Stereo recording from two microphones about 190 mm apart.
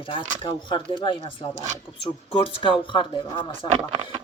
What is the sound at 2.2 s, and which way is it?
Speech, 30° left (ahead or behind).